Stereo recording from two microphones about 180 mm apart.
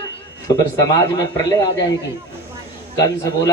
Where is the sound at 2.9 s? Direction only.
20° left (ahead or behind).